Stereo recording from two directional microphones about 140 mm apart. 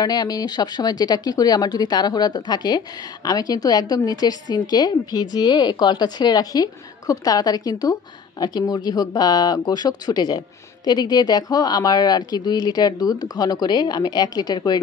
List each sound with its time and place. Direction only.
0.0 s a woman's voice: 30° left (ahead or behind)